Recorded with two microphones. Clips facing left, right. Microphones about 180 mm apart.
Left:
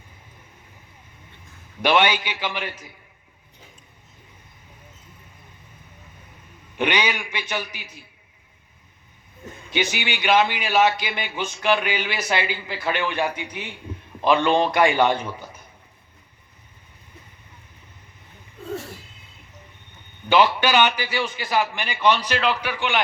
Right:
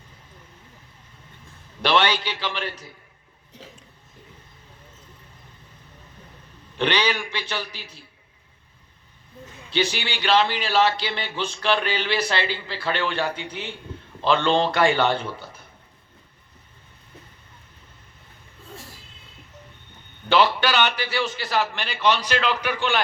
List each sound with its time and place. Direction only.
1.8 s a man's voice: 15° left (ahead or behind)
3.6 s a sound: 90° right
6.7 s a man's voice: 15° left (ahead or behind)
9.9 s a man's voice: 10° left (ahead or behind)
18.7 s a sound: 70° left (ahead or behind)
20.2 s a man's voice: 10° left (ahead or behind)